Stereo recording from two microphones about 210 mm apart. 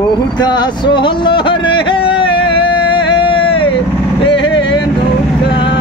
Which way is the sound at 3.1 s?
25° left (ahead or behind).